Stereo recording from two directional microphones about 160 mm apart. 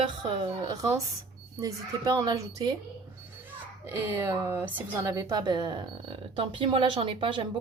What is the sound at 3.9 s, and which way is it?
A woman's voice, 15° right (ahead or behind).